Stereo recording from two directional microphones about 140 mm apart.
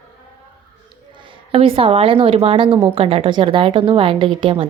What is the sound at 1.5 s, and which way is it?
A woman's voice, 40° right (ahead or behind).